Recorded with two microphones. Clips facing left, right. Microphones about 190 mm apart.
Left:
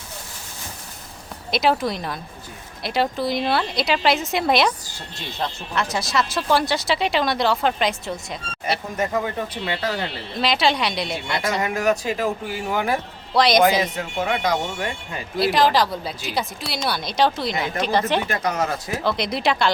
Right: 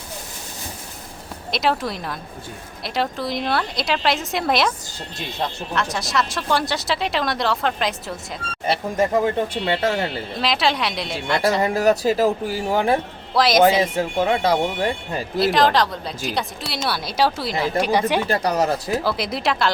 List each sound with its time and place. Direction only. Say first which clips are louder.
1.5 s speech: left 2 dB; centre (ahead or behind)
5.7 s speech: left 1 dB; centre (ahead or behind)
8.6 s speech: right 4 dB; 30° right (ahead or behind)
10.4 s speech: left 1 dB; centre (ahead or behind)
11.6 s speech: right 4 dB; 35° right (ahead or behind)
13.3 s speech: even; centre (ahead or behind)
13.6 s speech: right 2 dB; 25° right (ahead or behind)
15.4 s speech: right 1 dB; centre (ahead or behind)
18.3 s speech: right 4 dB; 35° right (ahead or behind)
19.0 s speech: left 1 dB; 5° right (ahead or behind)